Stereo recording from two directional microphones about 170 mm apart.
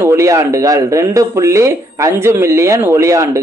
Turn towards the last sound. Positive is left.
turn(degrees=-15)  # may be behind; listen again after turning